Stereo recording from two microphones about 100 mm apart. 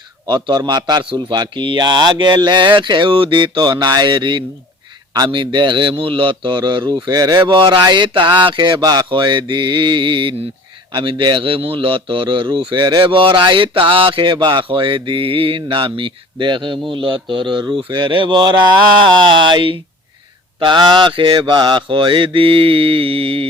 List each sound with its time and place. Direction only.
0.3 s a man's voice: 45° right (ahead or behind); by 23.5 s 70° right (ahead or behind)